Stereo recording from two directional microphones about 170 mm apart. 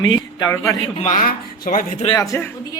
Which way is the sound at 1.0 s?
50° left (ahead or behind).